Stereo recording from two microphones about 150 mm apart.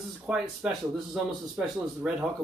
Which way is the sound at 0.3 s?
5° right (ahead or behind).